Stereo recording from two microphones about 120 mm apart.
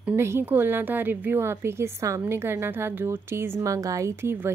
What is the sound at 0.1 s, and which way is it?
Speech, 20° right (ahead or behind).